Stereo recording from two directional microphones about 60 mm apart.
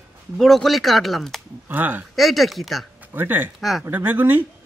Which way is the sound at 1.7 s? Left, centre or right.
Right.